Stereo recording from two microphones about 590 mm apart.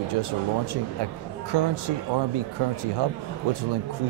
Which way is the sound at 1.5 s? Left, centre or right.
Right.